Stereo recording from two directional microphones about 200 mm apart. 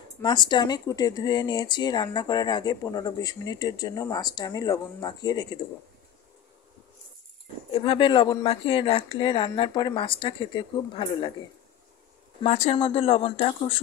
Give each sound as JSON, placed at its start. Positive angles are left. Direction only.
{"t": 0.2, "sound": "speech", "side_deg": 20}
{"t": 7.7, "sound": "speech", "side_deg": 25}
{"t": 12.4, "sound": "speech", "side_deg": 35}